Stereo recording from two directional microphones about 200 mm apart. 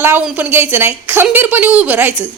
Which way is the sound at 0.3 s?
10° right (ahead or behind).